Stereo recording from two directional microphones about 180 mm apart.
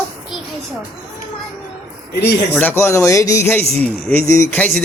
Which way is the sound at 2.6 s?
10° left (ahead or behind).